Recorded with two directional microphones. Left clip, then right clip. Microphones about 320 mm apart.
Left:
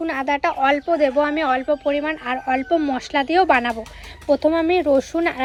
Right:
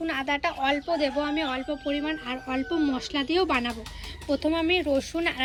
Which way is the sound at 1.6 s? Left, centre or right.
Centre.